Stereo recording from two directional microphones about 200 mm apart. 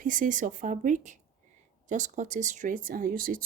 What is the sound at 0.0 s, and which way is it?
A woman's voice, 40° right (ahead or behind).